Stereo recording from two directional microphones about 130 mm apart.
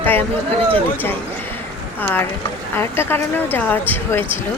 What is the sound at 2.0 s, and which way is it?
Speech, 15° left (ahead or behind).